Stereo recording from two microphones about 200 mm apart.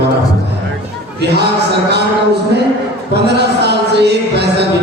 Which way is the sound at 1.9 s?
55° right (ahead or behind).